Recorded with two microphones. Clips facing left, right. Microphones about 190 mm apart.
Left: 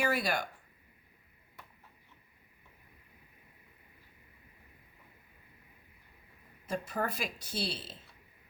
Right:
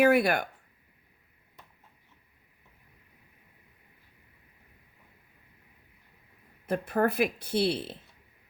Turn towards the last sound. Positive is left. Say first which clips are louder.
# right 11 dB
turn(degrees=-60)  # may be behind; listen again after turning